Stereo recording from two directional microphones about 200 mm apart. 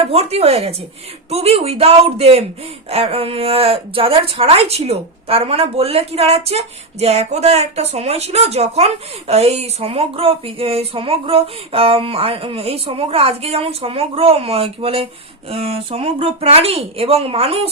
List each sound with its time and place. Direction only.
0.0 s speech: 30° right (ahead or behind)